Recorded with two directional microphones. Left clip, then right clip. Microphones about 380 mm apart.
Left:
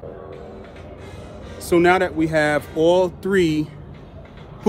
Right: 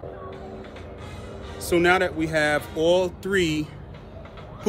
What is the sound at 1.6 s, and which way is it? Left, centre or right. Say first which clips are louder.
Speech: left 4 dB; centre.